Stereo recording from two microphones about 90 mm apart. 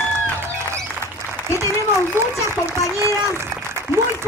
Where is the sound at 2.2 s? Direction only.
25° right (ahead or behind).